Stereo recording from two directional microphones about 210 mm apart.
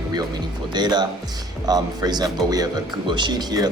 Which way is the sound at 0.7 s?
20° right (ahead or behind).